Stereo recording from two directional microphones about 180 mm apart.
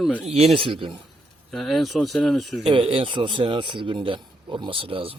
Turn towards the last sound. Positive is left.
turn(degrees=-30)  # may be behind; listen again after turning